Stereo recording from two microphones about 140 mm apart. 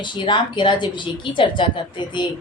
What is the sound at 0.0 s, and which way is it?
Speech, 35° left (ahead or behind).